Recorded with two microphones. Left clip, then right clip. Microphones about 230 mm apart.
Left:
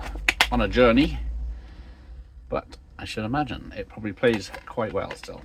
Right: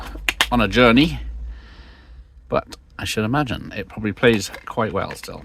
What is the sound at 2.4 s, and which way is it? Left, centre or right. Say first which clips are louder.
Speech: right 7 dB; right.